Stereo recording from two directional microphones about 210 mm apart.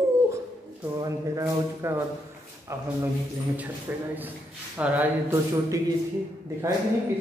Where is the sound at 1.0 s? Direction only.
15° right (ahead or behind).